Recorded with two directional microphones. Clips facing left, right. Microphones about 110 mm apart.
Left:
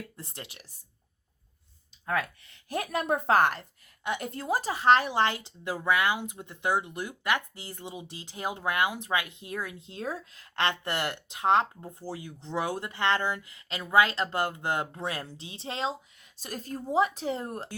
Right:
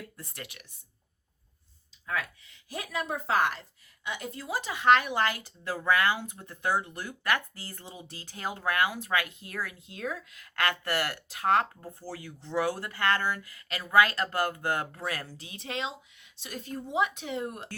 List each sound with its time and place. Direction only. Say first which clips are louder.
0.2 s a woman's voice: even; 25° left (ahead or behind)
2.6 s a woman's voice: left 5 dB; 50° left (ahead or behind); by 17.7 s 35° left (ahead or behind)